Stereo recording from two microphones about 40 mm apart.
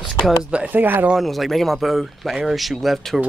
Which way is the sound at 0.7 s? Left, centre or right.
Right.